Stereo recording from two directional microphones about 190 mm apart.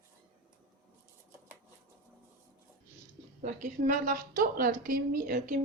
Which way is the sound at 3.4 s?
45° right (ahead or behind).